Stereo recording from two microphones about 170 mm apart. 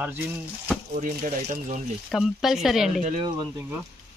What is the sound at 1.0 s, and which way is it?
Speech, 50° right (ahead or behind).